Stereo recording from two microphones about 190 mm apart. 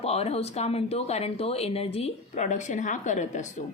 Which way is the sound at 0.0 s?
35° left (ahead or behind).